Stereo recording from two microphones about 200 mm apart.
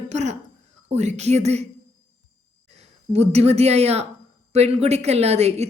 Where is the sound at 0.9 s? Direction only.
35° right (ahead or behind).